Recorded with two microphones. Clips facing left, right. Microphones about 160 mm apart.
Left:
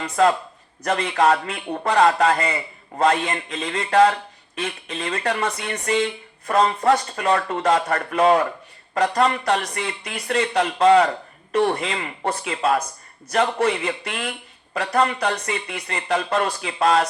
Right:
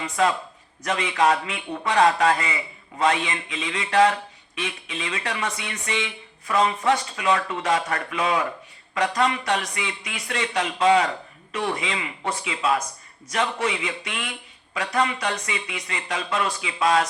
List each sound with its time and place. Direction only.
0.9 s speech: 55° left (ahead or behind)